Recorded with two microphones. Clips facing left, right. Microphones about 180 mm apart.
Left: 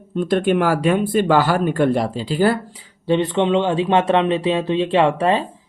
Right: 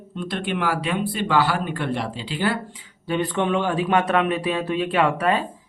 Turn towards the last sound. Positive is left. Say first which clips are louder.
# left 4 dB
turn(degrees=25)  # may be behind; listen again after turning